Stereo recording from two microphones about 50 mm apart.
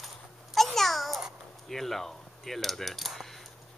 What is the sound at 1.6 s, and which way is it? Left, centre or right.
Speech, centre.